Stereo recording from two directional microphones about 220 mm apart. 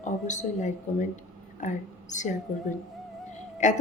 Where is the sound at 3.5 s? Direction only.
35° left (ahead or behind).